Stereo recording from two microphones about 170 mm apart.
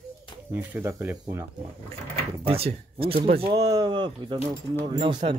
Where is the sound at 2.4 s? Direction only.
35° right (ahead or behind).